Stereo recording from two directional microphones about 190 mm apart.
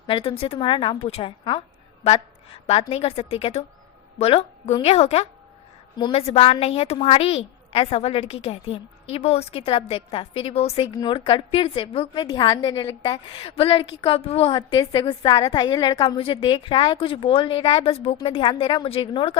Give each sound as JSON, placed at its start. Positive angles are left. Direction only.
{"t": 0.1, "sound": "a woman's voice", "side_deg": 30}
{"t": 14.5, "sound": "a woman's voice", "side_deg": 20}